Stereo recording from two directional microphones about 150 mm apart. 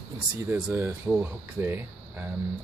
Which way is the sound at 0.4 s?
20° right (ahead or behind).